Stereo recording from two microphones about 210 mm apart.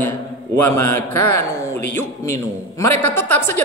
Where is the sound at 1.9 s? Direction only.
15° left (ahead or behind).